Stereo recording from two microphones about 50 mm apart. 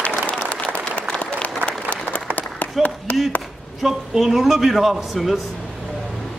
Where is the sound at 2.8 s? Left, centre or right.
Centre.